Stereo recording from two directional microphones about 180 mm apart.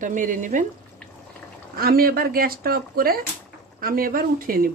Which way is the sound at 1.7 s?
55° right (ahead or behind).